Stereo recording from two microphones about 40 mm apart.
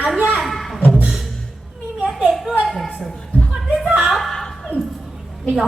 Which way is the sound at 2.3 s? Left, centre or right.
Centre.